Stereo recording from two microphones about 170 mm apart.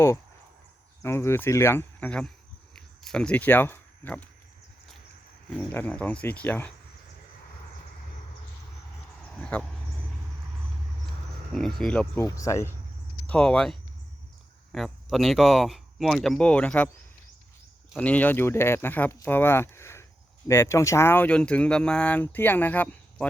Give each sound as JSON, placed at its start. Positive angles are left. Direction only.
{"t": 1.0, "sound": "speech", "side_deg": 15}
{"t": 5.5, "sound": "speech", "side_deg": 10}
{"t": 9.4, "sound": "speech", "side_deg": 5}
{"t": 11.5, "sound": "speech", "side_deg": 0}
{"t": 12.2, "sound": "speech", "side_deg": 15}
{"t": 13.2, "sound": "speech", "side_deg": 5}
{"t": 17.9, "sound": "speech", "side_deg": 10}